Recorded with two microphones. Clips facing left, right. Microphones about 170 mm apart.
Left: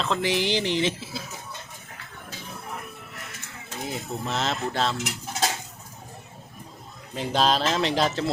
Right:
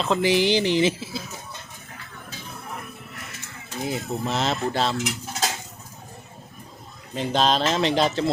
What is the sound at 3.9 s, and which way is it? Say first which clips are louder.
Speech: right 3 dB; centre (ahead or behind).